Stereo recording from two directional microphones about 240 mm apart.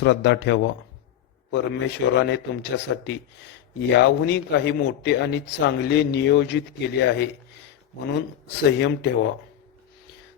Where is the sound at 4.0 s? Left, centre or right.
Left.